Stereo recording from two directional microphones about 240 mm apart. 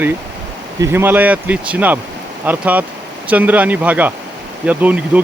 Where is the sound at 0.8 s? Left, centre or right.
Centre.